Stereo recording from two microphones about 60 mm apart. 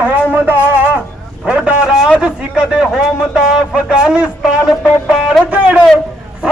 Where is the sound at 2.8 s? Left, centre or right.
Centre.